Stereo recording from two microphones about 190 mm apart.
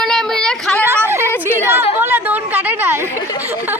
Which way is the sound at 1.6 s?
15° right (ahead or behind).